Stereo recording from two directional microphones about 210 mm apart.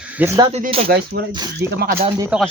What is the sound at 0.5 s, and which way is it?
Speech, 30° right (ahead or behind).